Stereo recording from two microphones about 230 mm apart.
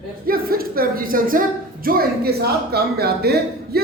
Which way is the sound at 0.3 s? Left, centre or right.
Right.